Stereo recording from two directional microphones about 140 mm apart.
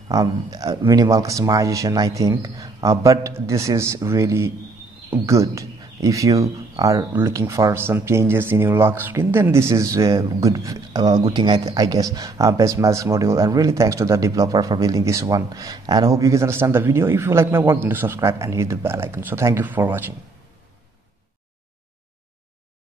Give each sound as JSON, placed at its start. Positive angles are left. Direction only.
{"t": 0.1, "sound": "speech", "side_deg": -25}